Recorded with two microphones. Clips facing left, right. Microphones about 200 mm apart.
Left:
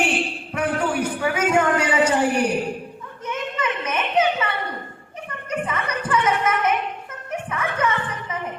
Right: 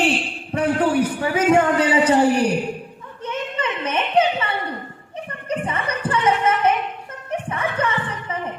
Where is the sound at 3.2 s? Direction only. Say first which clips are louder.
Right 1 dB; 30° right (ahead or behind).